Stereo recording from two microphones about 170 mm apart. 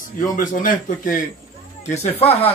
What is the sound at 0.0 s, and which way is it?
A man's voice, 50° left (ahead or behind).